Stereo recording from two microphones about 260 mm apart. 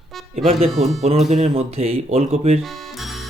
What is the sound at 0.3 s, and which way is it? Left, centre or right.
Speech, right.